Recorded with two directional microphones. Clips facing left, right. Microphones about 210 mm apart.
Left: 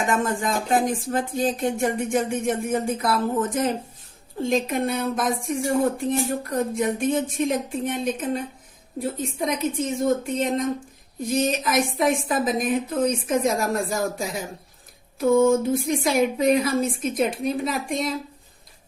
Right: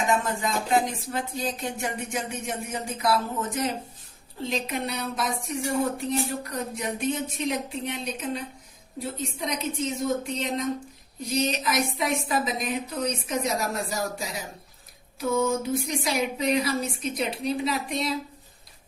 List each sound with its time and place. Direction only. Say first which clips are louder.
0.1 s speech: left 3 dB; 50° left (ahead or behind)